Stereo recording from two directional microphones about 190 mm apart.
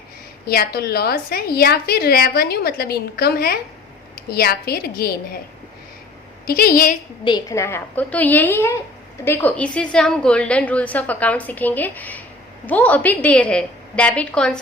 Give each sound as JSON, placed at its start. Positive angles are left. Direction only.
{"t": 0.4, "sound": "a woman's voice", "side_deg": 55}
{"t": 6.4, "sound": "a woman's voice", "side_deg": 50}
{"t": 7.3, "sound": "a woman's voice", "side_deg": 20}